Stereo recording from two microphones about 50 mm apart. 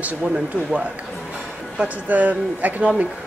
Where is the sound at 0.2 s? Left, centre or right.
Centre.